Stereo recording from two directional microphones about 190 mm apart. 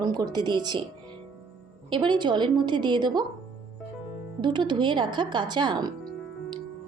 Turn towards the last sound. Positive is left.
turn(degrees=-20)  # may be behind; listen again after turning